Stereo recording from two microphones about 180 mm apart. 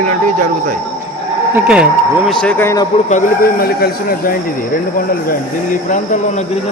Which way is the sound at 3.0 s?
45° left (ahead or behind).